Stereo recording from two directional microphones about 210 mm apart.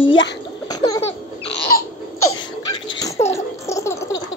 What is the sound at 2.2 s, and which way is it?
Baby laughter, 20° left (ahead or behind).